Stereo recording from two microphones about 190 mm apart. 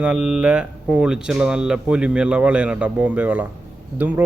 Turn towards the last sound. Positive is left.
turn(degrees=-10)  # may be behind; listen again after turning